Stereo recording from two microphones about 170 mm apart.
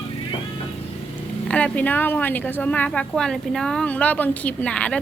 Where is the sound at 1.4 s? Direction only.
10° left (ahead or behind).